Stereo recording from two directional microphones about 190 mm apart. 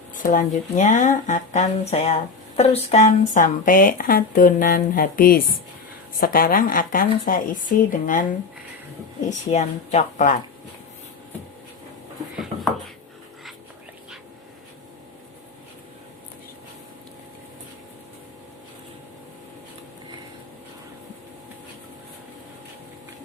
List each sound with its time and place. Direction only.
0.1 s speech: 45° left (ahead or behind)
9.5 s speech: 35° left (ahead or behind)